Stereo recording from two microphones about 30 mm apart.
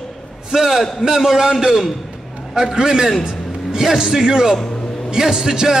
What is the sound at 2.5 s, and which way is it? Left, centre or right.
A man's voice, right.